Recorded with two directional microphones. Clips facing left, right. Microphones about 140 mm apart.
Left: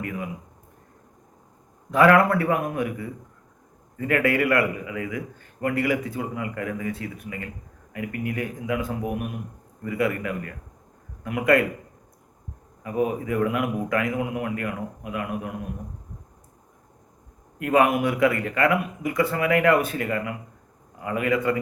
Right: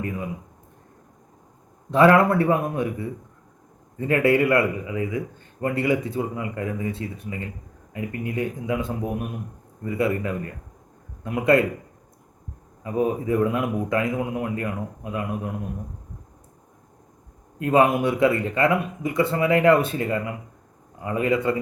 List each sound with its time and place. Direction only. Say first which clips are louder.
0.0 s a sound: right 2 dB; 25° right (ahead or behind)
1.9 s a man's voice: right 1 dB; 25° right (ahead or behind)
12.8 s a man's voice: right 2 dB; 25° right (ahead or behind)
17.6 s a man's voice: right 1 dB; 25° right (ahead or behind)